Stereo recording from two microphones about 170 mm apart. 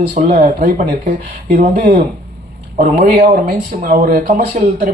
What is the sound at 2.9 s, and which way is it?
Speech, 55° right (ahead or behind).